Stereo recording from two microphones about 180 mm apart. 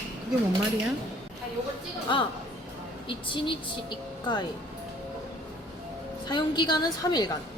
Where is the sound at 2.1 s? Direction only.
25° left (ahead or behind).